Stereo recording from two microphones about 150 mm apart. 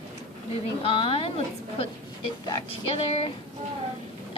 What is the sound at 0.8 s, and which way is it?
Speech, 35° left (ahead or behind).